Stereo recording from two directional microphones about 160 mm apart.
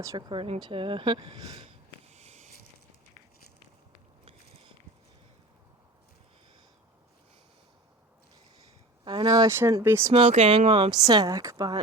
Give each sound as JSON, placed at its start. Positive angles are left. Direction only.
{"t": 0.0, "sound": "speech", "side_deg": -25}
{"t": 2.0, "sound": "a sound", "side_deg": -45}
{"t": 9.0, "sound": "speech", "side_deg": -25}
{"t": 10.1, "sound": "speech", "side_deg": -40}